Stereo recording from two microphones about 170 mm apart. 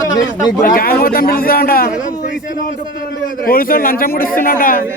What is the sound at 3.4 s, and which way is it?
A man's voice, 60° left (ahead or behind).